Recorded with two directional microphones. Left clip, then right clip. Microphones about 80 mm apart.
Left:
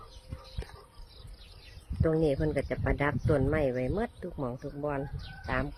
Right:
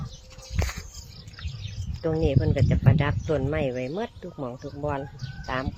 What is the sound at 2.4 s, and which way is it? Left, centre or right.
Speech, centre.